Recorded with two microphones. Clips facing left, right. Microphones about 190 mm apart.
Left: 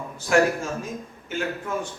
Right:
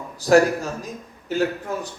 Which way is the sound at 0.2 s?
35° right (ahead or behind).